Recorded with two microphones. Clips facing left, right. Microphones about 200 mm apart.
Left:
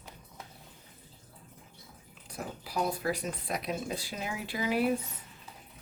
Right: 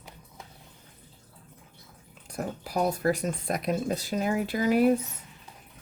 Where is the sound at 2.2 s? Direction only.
45° right (ahead or behind).